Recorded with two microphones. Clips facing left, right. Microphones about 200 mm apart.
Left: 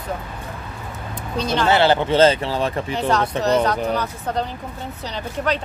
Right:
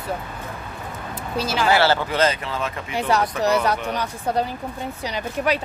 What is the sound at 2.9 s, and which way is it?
Speech, 10° right (ahead or behind).